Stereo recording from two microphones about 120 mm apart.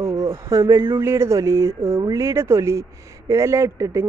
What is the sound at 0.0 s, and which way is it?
Speech, 25° right (ahead or behind).